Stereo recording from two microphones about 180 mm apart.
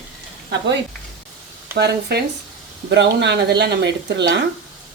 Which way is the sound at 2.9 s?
75° right (ahead or behind).